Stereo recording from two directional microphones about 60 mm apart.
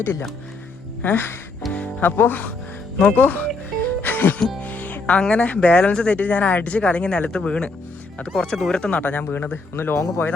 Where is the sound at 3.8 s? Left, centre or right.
Left.